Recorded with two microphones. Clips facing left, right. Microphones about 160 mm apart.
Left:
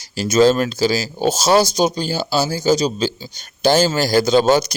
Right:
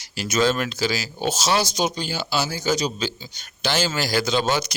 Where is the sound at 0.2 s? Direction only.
35° left (ahead or behind).